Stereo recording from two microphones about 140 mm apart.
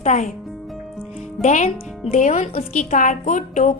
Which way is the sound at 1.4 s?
60° left (ahead or behind).